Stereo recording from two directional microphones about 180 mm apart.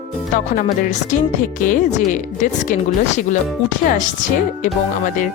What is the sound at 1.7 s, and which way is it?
Speech, 45° left (ahead or behind).